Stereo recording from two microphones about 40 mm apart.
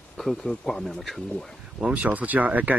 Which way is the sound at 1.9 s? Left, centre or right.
Right.